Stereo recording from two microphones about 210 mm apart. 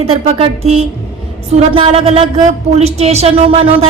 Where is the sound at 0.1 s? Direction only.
30° right (ahead or behind).